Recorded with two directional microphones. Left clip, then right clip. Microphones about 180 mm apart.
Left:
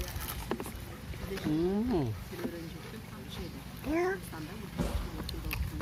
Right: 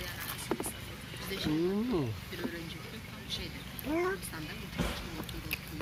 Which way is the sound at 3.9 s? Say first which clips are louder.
Left 1 dB; 15° right (ahead or behind).